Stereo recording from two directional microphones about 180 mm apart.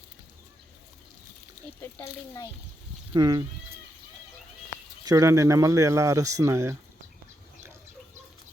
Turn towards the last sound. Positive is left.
turn(degrees=-15)  # may be behind; listen again after turning